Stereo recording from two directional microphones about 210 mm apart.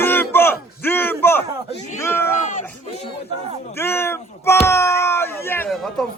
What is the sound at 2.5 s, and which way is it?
Speech, 35° left (ahead or behind).